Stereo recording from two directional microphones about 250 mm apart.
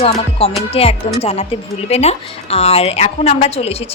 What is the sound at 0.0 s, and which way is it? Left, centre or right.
A woman's voice, left.